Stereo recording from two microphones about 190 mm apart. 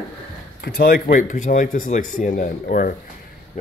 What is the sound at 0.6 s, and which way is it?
Speech, 50° left (ahead or behind).